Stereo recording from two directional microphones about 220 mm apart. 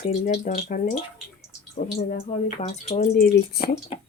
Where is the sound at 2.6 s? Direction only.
30° left (ahead or behind).